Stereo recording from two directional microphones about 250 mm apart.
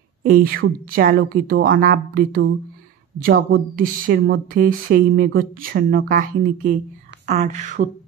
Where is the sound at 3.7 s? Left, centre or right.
Right.